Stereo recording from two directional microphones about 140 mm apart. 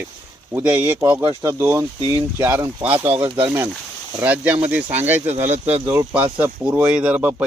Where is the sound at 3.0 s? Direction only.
40° right (ahead or behind).